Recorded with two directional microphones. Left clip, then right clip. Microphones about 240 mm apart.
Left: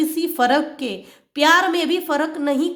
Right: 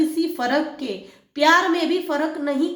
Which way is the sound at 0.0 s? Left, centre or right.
Left.